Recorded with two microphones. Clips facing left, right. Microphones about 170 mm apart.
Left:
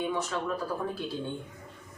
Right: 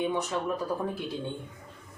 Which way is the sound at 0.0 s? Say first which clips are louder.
Right 2 dB; 20° right (ahead or behind).